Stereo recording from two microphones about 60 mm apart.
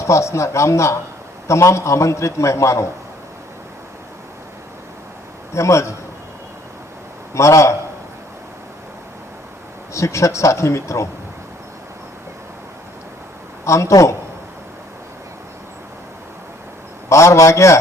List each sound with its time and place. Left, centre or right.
0.0 s a man's voice: left
5.5 s a man's voice: left
7.3 s a man's voice: left
9.9 s a man's voice: left
13.7 s a man's voice: left
17.1 s a man's voice: left